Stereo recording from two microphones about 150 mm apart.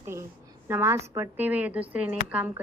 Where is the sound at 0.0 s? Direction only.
15° right (ahead or behind).